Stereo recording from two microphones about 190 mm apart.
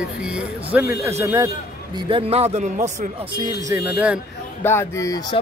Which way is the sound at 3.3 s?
20° right (ahead or behind).